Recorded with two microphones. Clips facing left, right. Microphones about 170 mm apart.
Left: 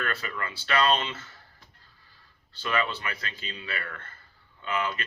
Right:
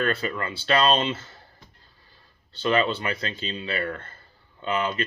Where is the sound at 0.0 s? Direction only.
30° right (ahead or behind).